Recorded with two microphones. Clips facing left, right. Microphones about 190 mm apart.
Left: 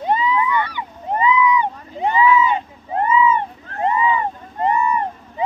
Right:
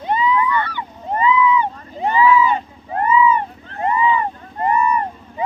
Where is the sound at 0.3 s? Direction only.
20° left (ahead or behind).